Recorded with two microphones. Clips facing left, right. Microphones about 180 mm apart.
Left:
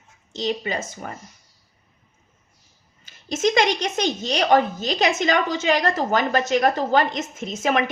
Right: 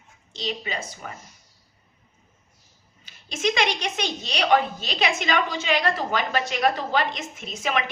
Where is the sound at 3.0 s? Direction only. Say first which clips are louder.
Left 4 dB; 45° left (ahead or behind).